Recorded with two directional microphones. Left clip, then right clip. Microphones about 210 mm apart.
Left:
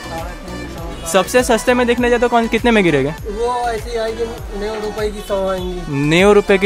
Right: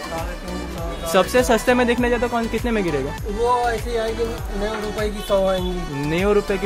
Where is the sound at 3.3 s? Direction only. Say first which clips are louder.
Even; centre (ahead or behind).